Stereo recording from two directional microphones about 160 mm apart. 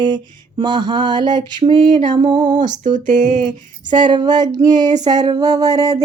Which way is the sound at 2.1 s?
30° right (ahead or behind).